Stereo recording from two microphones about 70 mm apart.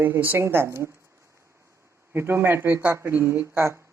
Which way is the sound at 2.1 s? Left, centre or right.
Right.